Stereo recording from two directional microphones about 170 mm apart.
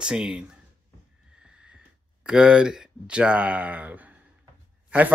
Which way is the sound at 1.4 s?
5° right (ahead or behind).